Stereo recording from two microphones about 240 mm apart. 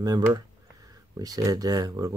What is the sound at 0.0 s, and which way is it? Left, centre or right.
Speech, centre.